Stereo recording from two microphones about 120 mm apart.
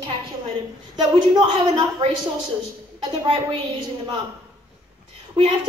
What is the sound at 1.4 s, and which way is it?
Speech, 50° right (ahead or behind).